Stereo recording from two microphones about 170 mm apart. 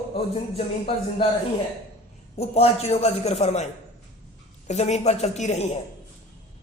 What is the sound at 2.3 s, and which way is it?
A man's voice, 35° left (ahead or behind).